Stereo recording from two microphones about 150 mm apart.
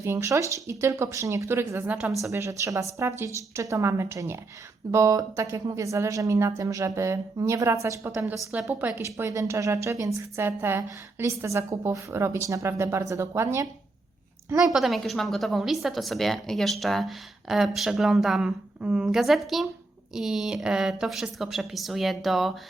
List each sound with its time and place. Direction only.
0.0 s a woman's voice: 20° right (ahead or behind)
14.6 s a woman's voice: centre (ahead or behind)